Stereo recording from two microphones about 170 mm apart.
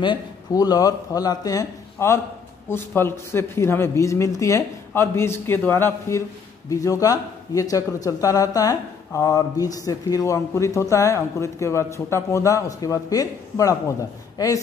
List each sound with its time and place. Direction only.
0.0 s speech: 25° left (ahead or behind)